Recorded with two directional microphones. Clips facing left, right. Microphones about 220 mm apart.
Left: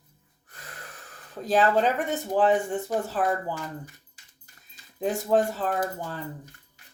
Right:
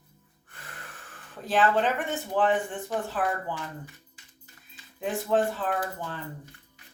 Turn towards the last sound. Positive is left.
turn(degrees=40)  # may be behind; listen again after turning